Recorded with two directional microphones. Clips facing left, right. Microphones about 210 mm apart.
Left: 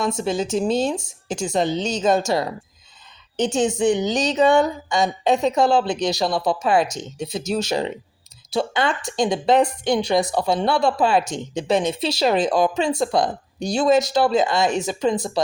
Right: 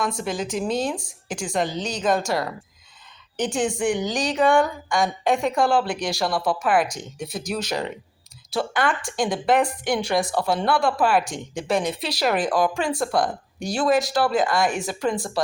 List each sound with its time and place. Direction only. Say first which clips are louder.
0.0 s a woman's voice: left 4 dB; 25° left (ahead or behind)